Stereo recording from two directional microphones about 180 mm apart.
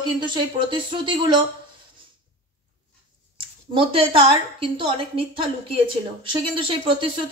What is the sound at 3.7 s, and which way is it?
Speech, 30° right (ahead or behind).